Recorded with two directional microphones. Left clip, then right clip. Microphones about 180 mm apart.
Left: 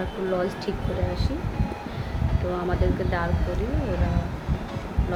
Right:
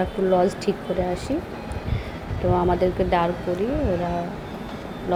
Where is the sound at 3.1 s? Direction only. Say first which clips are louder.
Right 8 dB; 35° right (ahead or behind).